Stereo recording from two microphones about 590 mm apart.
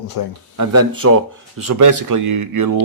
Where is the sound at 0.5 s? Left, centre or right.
Right.